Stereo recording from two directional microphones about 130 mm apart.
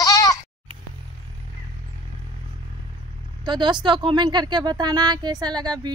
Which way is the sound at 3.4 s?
35° right (ahead or behind).